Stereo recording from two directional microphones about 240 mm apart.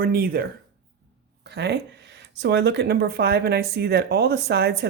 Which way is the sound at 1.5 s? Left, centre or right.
Right.